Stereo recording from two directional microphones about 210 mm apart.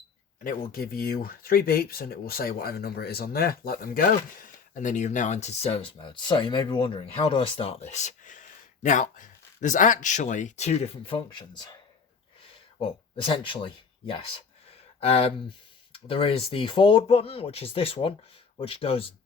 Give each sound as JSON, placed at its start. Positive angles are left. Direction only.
{"t": 0.7, "sound": "speech", "side_deg": 45}
{"t": 12.8, "sound": "speech", "side_deg": 25}